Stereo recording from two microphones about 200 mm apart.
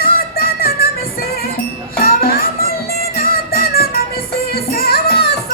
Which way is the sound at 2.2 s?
45° left (ahead or behind).